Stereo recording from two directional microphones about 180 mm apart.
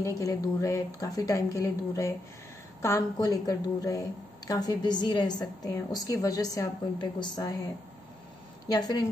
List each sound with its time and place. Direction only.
0.0 s a woman's voice: 15° left (ahead or behind)
8.6 s a woman's voice: 20° left (ahead or behind)